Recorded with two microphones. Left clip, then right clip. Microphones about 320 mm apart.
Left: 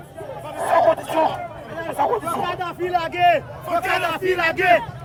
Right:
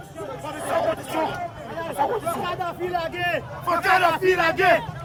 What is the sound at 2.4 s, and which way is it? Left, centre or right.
Speech, centre.